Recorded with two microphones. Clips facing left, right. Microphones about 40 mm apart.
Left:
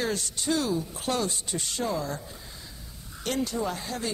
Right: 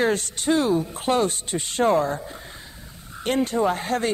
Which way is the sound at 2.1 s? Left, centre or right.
Right.